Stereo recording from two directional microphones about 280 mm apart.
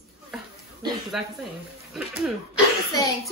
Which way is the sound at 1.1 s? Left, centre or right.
Centre.